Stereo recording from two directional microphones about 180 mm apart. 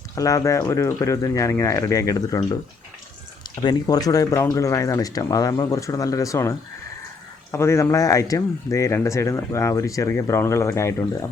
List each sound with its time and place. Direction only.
0.2 s speech: 20° left (ahead or behind)